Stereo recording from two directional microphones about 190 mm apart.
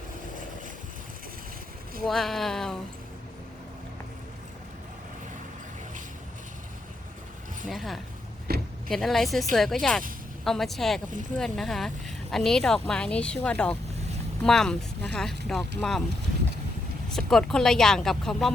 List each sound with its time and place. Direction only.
2.0 s speech: centre (ahead or behind)
7.7 s speech: centre (ahead or behind)
8.5 s vehicle: 55° right (ahead or behind)
8.9 s speech: centre (ahead or behind)
17.1 s speech: 5° left (ahead or behind)